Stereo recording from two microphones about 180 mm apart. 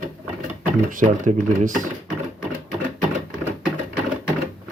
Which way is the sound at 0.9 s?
45° right (ahead or behind).